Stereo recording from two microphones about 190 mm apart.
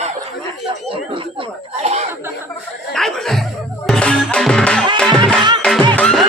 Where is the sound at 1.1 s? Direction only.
30° right (ahead or behind).